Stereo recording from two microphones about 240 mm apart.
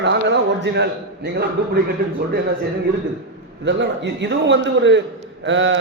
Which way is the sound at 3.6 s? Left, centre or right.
Right.